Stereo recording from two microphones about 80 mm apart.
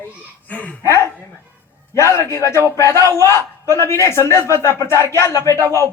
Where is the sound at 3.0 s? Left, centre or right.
Right.